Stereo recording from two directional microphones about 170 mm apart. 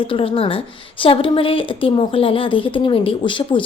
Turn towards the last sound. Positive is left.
turn(degrees=30)  # may be behind; listen again after turning